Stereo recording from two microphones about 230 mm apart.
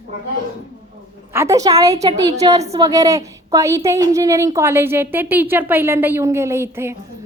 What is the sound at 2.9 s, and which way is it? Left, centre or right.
A woman's voice, centre.